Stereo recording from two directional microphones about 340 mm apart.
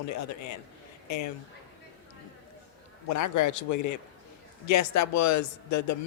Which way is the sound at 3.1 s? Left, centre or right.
Left.